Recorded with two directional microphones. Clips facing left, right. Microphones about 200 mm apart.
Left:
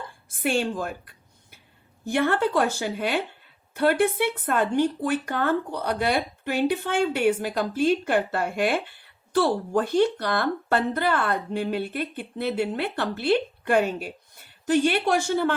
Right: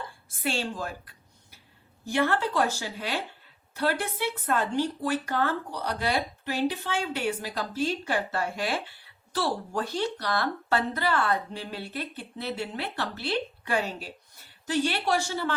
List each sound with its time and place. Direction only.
0.4 s a woman's voice: 55° left (ahead or behind)